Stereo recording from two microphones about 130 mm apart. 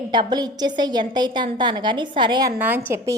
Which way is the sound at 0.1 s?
35° right (ahead or behind).